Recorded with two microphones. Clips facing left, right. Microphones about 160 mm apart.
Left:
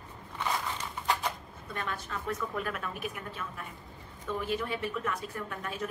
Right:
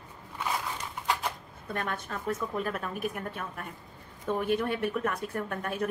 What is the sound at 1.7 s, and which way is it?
A woman's voice, 55° right (ahead or behind).